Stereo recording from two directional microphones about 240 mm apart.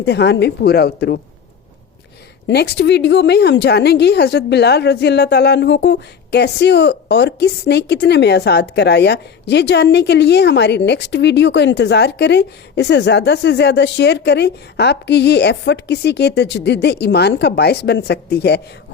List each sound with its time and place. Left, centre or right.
0.0 s speech: left
2.5 s speech: left